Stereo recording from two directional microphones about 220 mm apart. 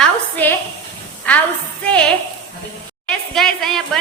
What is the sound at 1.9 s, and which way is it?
A woman's voice, 5° left (ahead or behind).